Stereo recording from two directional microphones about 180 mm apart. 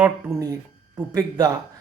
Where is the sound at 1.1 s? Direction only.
20° right (ahead or behind).